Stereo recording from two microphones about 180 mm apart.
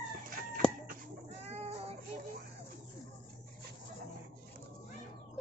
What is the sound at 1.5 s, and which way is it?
Child singing, 35° right (ahead or behind).